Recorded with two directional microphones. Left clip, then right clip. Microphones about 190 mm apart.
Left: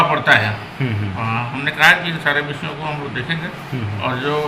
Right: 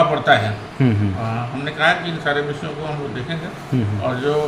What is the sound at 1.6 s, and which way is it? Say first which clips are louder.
Speech: left 5 dB; 5° right (ahead or behind).